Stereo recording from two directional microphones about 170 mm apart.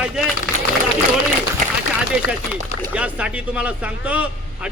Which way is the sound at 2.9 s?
5° right (ahead or behind).